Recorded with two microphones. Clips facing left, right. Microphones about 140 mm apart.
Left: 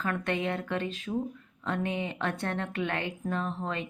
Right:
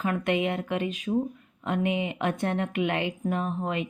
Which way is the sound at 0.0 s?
15° right (ahead or behind).